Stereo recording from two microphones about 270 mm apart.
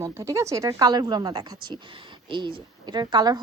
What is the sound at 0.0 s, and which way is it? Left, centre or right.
A woman's voice, centre.